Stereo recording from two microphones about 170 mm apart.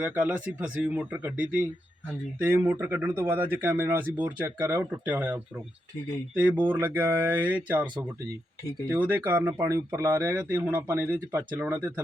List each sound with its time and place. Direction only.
0.0 s speech: 5° right (ahead or behind)